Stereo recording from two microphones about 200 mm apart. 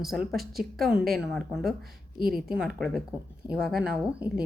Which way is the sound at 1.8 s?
50° right (ahead or behind).